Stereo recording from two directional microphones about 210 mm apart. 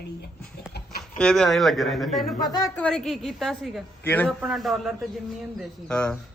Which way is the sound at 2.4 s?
20° left (ahead or behind).